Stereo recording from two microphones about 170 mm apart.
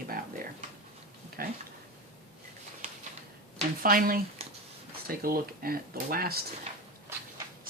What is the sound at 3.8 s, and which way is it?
Speech, 55° right (ahead or behind).